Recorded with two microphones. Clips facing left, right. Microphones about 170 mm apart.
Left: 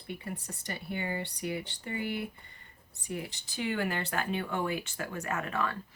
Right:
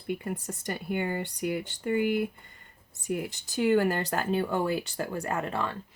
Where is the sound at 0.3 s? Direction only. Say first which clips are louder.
Right 6 dB; 45° right (ahead or behind).